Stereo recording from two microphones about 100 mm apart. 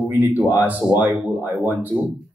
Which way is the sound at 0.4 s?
15° right (ahead or behind).